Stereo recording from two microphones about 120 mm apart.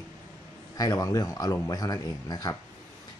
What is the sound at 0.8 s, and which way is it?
Speech, 30° left (ahead or behind).